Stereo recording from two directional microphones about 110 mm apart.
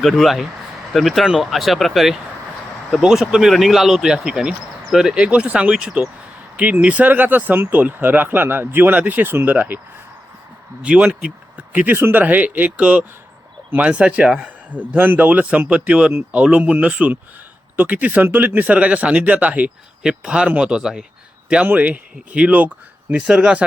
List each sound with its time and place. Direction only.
0.0 s speech: centre (ahead or behind); by 9.8 s 15° right (ahead or behind)
10.8 s speech: 10° right (ahead or behind)